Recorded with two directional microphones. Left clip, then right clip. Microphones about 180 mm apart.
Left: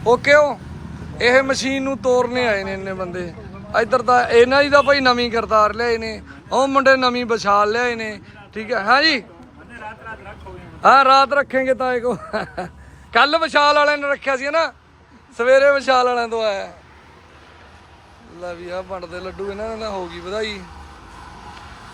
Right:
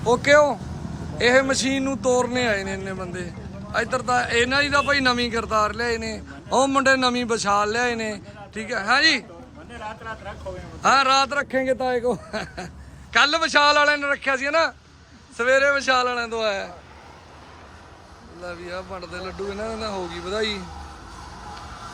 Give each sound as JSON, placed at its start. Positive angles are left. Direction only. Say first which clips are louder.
{"t": 0.0, "sound": "speech", "louder": "left 3 dB", "side_deg": -15}
{"t": 10.8, "sound": "a man's voice", "louder": "left 6 dB", "side_deg": -5}
{"t": 18.4, "sound": "speech", "louder": "left 5 dB", "side_deg": -5}